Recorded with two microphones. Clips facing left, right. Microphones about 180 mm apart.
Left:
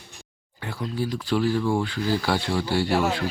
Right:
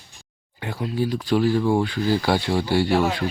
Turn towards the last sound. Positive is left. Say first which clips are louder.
# right 3 dB
turn(degrees=-15)  # may be behind; listen again after turning